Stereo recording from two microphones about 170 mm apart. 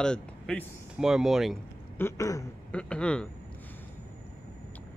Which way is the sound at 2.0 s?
20° left (ahead or behind).